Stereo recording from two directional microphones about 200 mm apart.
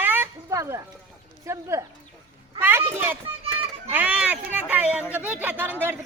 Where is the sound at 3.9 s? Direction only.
5° right (ahead or behind).